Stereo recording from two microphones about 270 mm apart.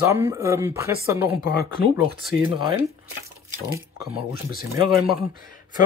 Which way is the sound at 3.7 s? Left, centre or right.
Centre.